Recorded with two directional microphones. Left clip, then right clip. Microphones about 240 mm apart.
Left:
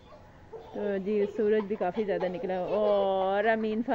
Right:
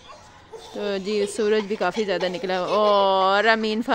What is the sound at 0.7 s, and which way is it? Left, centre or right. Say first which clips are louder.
Speech: right 4 dB; right.